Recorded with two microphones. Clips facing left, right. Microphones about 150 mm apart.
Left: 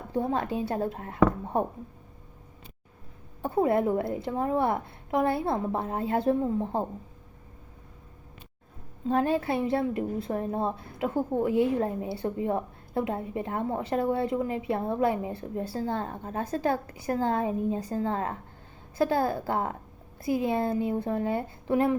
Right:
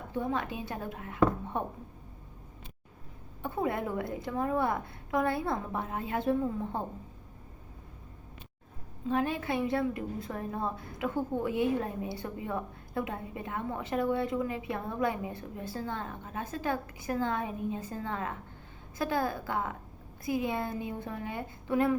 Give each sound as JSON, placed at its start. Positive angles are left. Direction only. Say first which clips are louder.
{"t": 0.1, "sound": "a woman's voice", "louder": "left 5 dB", "side_deg": 35}
{"t": 3.4, "sound": "a woman's voice", "louder": "left 8 dB", "side_deg": 35}
{"t": 9.0, "sound": "a woman's voice", "louder": "left 5 dB", "side_deg": 35}